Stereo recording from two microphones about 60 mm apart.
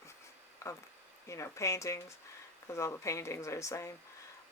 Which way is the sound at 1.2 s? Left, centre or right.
Left.